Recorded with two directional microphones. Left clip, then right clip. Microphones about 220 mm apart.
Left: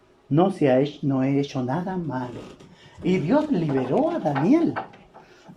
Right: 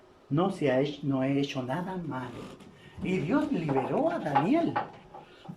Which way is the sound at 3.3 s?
30° left (ahead or behind).